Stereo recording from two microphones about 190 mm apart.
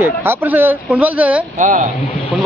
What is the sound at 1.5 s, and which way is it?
Speech, 45° right (ahead or behind).